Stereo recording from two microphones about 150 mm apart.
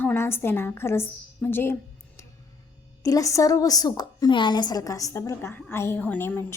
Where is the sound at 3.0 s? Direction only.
20° left (ahead or behind).